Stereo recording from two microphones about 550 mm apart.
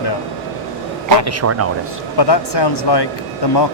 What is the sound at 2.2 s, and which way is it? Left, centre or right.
Speech, left.